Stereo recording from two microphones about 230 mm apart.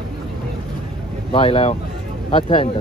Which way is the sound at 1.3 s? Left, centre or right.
Left.